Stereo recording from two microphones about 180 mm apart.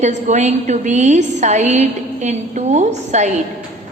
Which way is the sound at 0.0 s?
40° right (ahead or behind).